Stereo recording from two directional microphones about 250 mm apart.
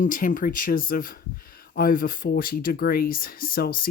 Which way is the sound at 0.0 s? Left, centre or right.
Left.